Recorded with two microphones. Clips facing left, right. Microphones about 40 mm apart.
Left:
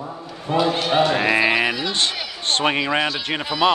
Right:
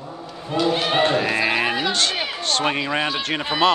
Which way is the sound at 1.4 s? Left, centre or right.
Centre.